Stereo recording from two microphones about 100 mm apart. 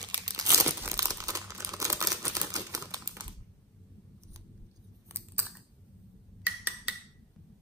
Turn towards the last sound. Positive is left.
turn(degrees=-15)  # may be behind; listen again after turning